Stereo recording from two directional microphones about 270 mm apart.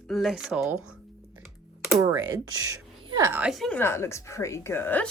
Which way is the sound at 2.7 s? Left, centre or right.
Centre.